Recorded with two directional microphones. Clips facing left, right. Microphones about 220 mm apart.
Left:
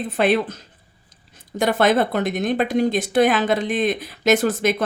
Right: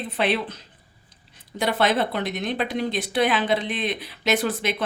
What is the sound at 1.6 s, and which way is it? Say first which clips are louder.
Speech: left 5 dB; 50° left (ahead or behind).